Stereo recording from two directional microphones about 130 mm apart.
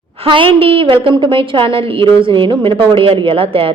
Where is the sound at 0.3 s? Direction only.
45° right (ahead or behind).